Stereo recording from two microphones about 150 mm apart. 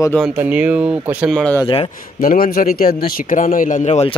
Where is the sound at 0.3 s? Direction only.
10° right (ahead or behind).